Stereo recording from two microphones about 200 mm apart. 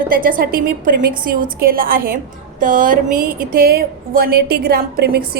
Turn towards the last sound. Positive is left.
turn(degrees=-50)  # may be behind; listen again after turning